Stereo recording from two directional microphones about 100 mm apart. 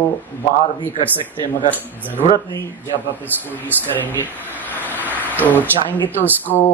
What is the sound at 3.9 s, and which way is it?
Speech, 20° left (ahead or behind).